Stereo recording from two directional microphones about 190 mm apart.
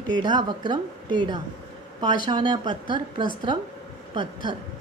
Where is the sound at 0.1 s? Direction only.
25° right (ahead or behind).